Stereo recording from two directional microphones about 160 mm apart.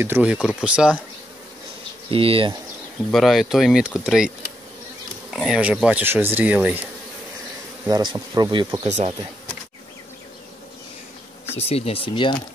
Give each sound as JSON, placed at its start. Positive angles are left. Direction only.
{"t": 0.0, "sound": "speech", "side_deg": -10}
{"t": 2.0, "sound": "insect", "side_deg": -35}
{"t": 3.1, "sound": "speech", "side_deg": 0}
{"t": 5.3, "sound": "speech", "side_deg": -5}
{"t": 7.8, "sound": "speech", "side_deg": -25}
{"t": 8.8, "sound": "speech", "side_deg": -45}
{"t": 11.7, "sound": "speech", "side_deg": 35}